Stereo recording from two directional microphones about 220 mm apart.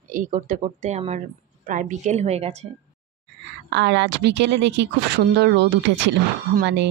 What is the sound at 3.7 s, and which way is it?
Speech, 50° right (ahead or behind).